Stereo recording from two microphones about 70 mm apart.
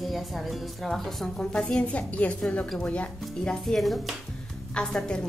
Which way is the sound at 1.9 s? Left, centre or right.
Centre.